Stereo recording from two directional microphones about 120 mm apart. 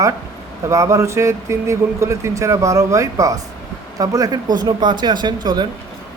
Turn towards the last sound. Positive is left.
turn(degrees=-35)  # may be behind; listen again after turning